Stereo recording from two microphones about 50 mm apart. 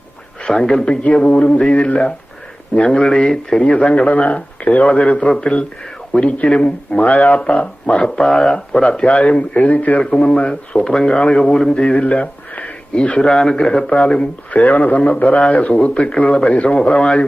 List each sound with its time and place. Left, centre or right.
0.4 s speech: centre
1.0 s a man's voice: left
8.0 s a man's voice: centre; by 10.0 s left
10.0 s a man's voice: centre
10.8 s speech: centre
11.9 s a sound: left
12.9 s speech: left
14.8 s a man's voice: left